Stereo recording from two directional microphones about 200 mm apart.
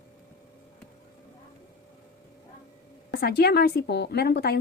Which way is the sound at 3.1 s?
55° left (ahead or behind).